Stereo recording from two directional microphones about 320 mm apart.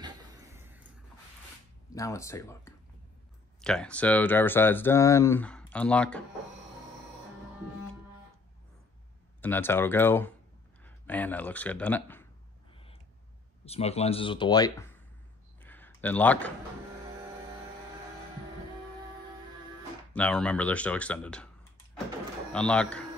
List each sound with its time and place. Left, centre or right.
1.9 s speech: centre
9.4 s speech: centre
13.7 s speech: centre
15.6 s a sound: centre
20.1 s speech: centre
22.5 s speech: centre